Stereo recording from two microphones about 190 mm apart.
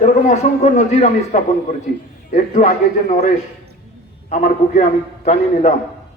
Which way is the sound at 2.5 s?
40° left (ahead or behind).